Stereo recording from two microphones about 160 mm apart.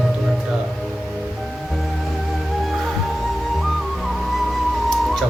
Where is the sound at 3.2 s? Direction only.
Centre (ahead or behind).